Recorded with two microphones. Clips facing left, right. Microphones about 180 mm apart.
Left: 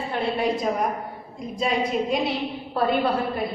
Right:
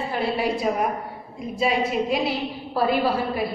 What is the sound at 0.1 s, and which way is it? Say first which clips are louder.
Speech: left 1 dB; 5° right (ahead or behind).